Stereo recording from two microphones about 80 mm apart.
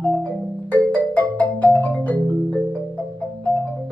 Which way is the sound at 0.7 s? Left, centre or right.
Left.